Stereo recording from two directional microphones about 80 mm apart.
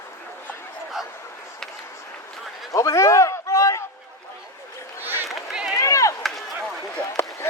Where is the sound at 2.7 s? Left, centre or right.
Left.